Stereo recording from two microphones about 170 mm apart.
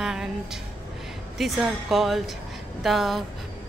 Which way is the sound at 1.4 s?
Centre (ahead or behind).